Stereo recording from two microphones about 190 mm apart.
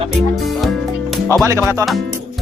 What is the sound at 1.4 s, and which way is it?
Speech, 15° right (ahead or behind).